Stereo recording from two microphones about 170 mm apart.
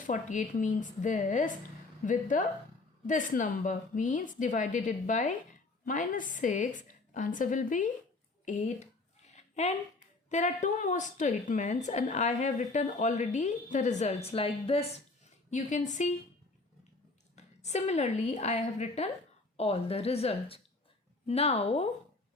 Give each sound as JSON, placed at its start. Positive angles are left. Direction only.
{"t": 0.0, "sound": "a woman's voice", "side_deg": 45}
{"t": 9.3, "sound": "a sound", "side_deg": 40}
{"t": 10.2, "sound": "a woman's voice", "side_deg": 45}
{"t": 17.3, "sound": "a woman's voice", "side_deg": 40}